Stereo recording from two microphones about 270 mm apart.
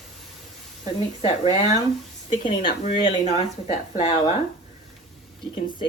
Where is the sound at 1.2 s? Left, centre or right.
Left.